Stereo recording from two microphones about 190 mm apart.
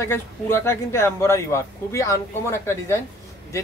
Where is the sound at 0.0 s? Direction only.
15° left (ahead or behind).